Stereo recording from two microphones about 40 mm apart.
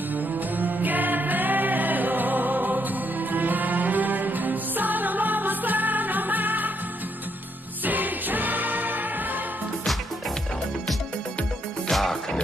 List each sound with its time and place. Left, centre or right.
0.1 s music: right
7.8 s music: right
11.9 s music: centre